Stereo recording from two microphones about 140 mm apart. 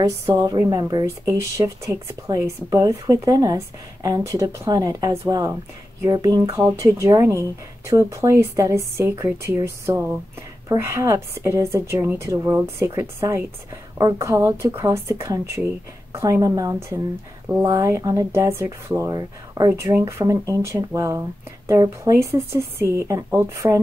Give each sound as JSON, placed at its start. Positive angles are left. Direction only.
{"t": 0.0, "sound": "speech", "side_deg": -25}